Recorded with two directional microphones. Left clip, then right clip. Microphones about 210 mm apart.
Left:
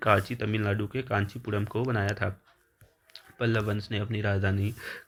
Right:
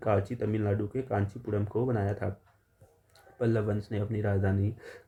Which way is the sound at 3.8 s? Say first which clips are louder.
Left 1 dB; 25° left (ahead or behind).